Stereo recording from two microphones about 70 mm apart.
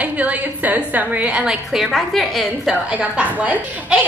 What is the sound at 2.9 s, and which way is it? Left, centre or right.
A woman's voice, centre.